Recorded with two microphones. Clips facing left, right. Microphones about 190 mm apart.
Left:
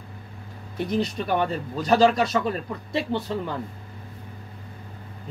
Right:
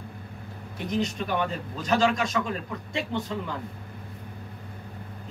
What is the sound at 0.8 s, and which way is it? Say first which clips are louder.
Speech: left 2 dB; 35° left (ahead or behind).